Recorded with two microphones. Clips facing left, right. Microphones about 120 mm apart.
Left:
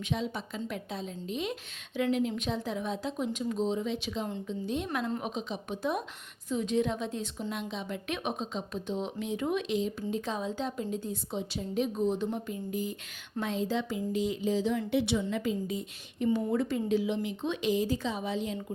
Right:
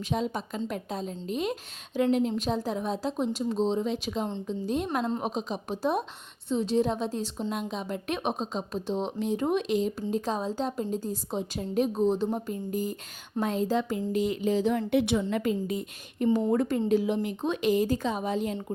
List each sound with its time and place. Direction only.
0.0 s a woman's voice: 40° right (ahead or behind)